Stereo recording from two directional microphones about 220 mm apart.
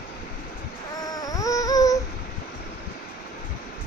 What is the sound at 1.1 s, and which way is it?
Music, 15° left (ahead or behind).